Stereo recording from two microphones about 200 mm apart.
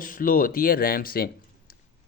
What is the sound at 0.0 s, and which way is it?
Speech, 45° left (ahead or behind).